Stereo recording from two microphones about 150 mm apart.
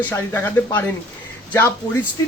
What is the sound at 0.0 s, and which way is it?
Speech, 15° left (ahead or behind).